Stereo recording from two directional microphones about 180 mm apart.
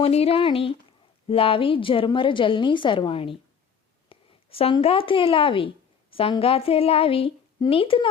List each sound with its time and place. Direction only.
0.0 s speech: 35° left (ahead or behind)